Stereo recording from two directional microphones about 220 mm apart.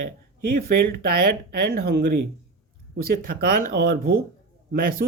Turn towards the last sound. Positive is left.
turn(degrees=-40)  # may be behind; listen again after turning